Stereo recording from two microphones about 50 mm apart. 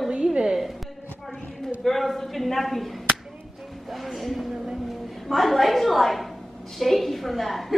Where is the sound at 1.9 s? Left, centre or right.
Centre.